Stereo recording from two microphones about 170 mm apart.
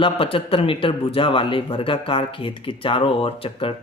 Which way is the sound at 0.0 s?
30° left (ahead or behind).